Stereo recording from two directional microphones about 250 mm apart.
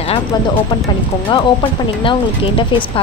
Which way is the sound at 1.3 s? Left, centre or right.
Centre.